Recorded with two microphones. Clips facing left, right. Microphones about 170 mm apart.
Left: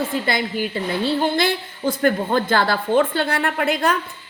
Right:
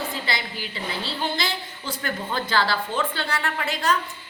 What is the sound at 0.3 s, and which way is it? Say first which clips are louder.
A woman's voice: left 8 dB; 50° left (ahead or behind).